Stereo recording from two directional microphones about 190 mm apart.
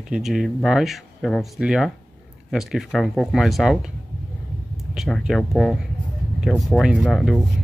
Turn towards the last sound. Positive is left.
turn(degrees=0)  # may be behind; listen again after turning